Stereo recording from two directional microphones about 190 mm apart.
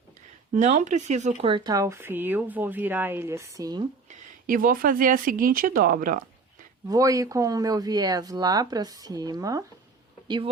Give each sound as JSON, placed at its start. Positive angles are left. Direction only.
{"t": 0.5, "sound": "speech", "side_deg": -40}
{"t": 4.1, "sound": "speech", "side_deg": -45}
{"t": 6.8, "sound": "speech", "side_deg": -20}